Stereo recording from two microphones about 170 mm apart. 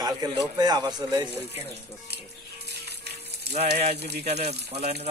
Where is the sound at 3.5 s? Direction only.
75° right (ahead or behind).